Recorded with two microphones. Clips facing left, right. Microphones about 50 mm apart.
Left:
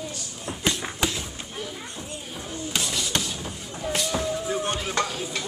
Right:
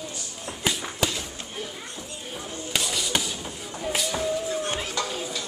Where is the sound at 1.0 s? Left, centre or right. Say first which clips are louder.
Even; centre.